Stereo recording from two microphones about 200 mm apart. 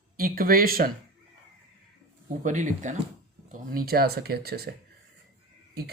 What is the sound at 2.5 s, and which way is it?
Speech, 40° right (ahead or behind).